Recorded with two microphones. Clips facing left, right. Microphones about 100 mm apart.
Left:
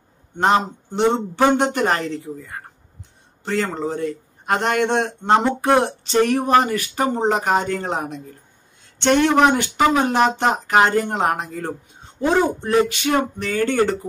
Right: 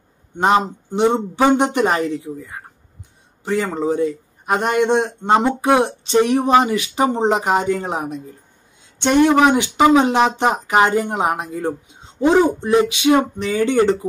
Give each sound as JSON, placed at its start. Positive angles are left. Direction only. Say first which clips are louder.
{"t": 0.4, "sound": "speech", "louder": "right 2 dB", "side_deg": -10}
{"t": 3.4, "sound": "speech", "louder": "right 3 dB", "side_deg": -10}